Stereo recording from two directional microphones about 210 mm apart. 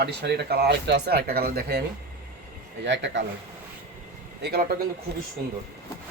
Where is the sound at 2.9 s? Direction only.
60° right (ahead or behind).